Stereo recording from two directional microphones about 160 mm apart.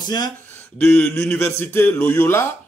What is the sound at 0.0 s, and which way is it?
Speech, 25° left (ahead or behind).